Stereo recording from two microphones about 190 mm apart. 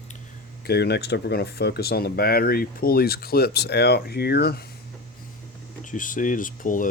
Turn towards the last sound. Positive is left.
turn(degrees=45)  # may be behind; listen again after turning